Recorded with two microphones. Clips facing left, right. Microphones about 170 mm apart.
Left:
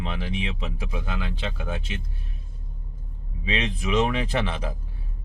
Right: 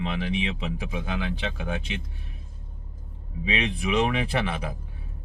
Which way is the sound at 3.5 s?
15° right (ahead or behind).